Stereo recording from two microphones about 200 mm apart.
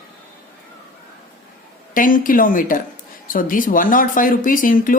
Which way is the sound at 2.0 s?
45° left (ahead or behind).